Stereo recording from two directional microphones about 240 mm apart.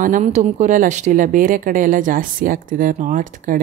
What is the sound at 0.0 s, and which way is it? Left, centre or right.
Speech, right.